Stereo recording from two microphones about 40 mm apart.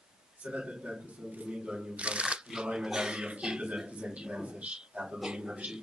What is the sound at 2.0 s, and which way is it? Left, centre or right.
A man's voice, right.